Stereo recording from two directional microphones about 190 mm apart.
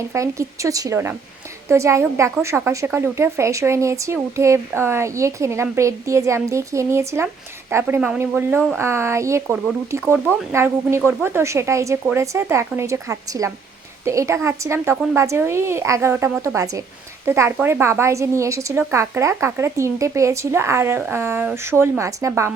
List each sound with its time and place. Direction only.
0.1 s a woman's voice: 15° right (ahead or behind)